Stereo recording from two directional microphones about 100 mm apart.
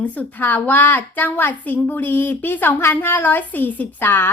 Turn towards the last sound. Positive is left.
turn(degrees=20)  # may be behind; listen again after turning